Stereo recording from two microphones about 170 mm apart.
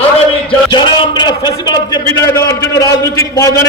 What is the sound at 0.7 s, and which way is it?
A man's voice, 25° left (ahead or behind).